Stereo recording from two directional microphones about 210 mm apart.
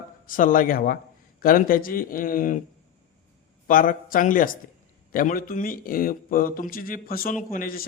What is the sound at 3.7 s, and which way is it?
A man's voice, 40° left (ahead or behind).